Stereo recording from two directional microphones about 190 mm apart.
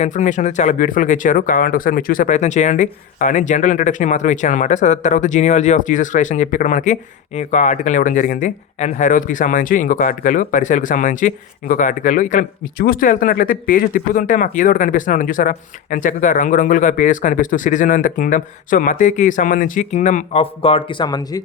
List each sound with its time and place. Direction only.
0.0 s speech: 40° left (ahead or behind); by 21.4 s 20° left (ahead or behind)